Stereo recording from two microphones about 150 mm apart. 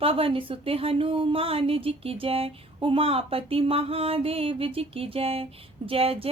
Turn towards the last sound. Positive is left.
turn(degrees=-40)  # may be behind; listen again after turning